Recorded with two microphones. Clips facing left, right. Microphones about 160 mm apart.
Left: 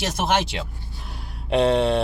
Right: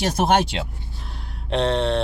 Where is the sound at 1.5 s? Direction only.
5° left (ahead or behind).